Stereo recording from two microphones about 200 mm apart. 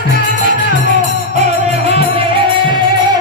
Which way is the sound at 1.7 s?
30° right (ahead or behind).